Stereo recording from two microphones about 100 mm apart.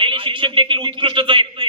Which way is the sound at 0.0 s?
60° right (ahead or behind).